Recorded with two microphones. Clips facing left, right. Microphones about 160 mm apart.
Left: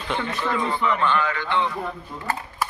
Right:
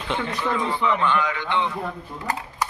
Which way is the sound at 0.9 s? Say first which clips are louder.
Even; 15° right (ahead or behind).